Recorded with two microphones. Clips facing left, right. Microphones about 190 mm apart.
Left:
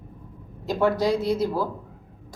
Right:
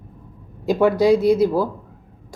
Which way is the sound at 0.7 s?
10° right (ahead or behind).